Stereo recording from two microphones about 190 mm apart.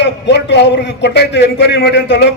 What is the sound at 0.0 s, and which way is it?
A man's voice, 65° left (ahead or behind).